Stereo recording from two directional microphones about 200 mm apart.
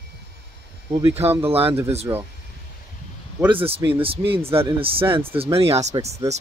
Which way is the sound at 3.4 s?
25° right (ahead or behind).